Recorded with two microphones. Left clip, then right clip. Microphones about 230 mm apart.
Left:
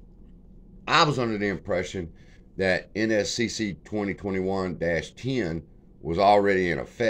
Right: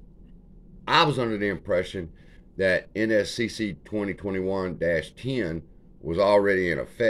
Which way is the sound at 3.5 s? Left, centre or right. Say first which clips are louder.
Even; centre.